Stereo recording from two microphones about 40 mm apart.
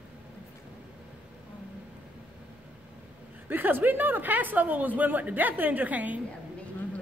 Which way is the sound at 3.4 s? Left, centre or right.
Right.